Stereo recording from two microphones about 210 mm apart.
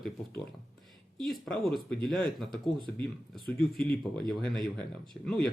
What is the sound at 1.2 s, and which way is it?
Speech, centre (ahead or behind).